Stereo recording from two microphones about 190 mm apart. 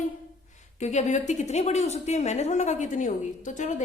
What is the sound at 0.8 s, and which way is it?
A woman's voice, 35° left (ahead or behind).